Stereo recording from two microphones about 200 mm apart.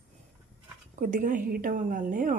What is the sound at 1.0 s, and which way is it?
A woman's voice, 40° right (ahead or behind).